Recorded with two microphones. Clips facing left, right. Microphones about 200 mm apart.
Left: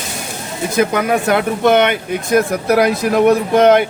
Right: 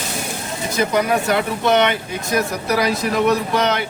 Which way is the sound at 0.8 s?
55° left (ahead or behind).